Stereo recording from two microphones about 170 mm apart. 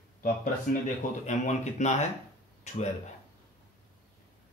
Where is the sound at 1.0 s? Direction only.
45° left (ahead or behind).